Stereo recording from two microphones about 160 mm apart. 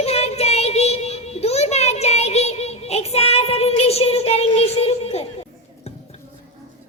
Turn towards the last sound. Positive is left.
turn(degrees=40)  # may be behind; listen again after turning